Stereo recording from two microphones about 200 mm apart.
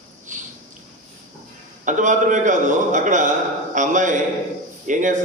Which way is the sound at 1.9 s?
40° right (ahead or behind).